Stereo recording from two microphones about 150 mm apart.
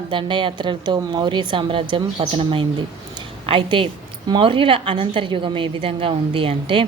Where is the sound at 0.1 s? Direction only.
30° right (ahead or behind).